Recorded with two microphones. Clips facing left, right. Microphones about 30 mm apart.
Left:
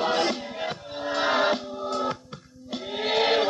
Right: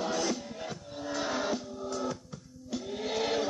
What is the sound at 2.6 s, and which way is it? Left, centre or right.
Choir, left.